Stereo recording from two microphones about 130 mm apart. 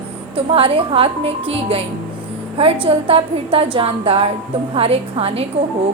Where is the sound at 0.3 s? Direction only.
45° right (ahead or behind).